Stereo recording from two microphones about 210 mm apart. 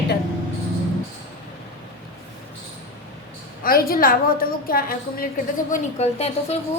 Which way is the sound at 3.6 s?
45° left (ahead or behind).